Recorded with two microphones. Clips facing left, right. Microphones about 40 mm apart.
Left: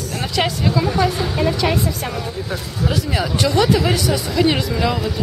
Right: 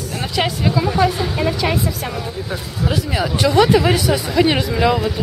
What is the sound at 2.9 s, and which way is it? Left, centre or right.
Speech, centre.